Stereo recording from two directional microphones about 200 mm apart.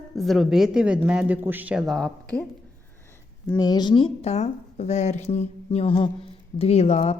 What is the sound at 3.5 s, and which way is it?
Speech, 20° left (ahead or behind).